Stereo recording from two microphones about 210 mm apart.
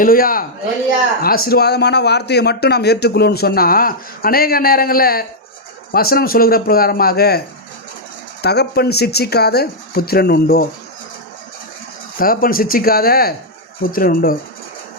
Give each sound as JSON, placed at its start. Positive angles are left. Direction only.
{"t": 0.0, "sound": "speech", "side_deg": 40}
{"t": 12.2, "sound": "speech", "side_deg": 45}